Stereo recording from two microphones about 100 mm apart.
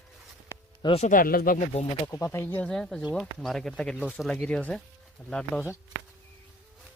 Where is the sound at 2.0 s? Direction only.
30° left (ahead or behind).